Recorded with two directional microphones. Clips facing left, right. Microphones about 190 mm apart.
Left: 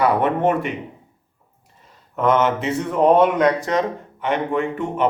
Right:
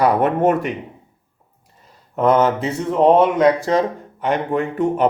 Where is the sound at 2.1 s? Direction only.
35° right (ahead or behind).